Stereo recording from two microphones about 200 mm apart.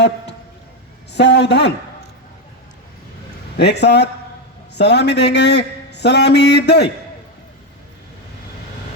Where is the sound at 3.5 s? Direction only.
55° left (ahead or behind).